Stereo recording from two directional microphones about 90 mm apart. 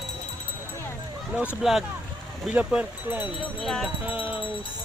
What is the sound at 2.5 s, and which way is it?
Speech, 15° right (ahead or behind).